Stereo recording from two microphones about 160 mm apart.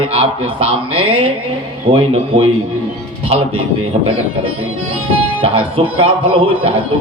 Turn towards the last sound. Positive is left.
turn(degrees=-35)  # may be behind; listen again after turning